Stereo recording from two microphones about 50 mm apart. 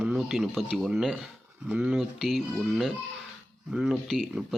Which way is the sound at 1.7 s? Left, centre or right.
Right.